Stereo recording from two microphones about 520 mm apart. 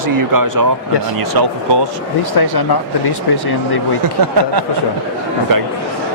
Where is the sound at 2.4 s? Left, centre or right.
Left.